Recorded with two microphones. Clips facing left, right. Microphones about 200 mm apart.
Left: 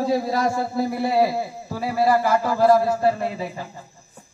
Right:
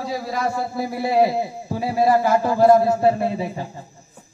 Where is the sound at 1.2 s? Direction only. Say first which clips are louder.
Right 2 dB; 25° right (ahead or behind).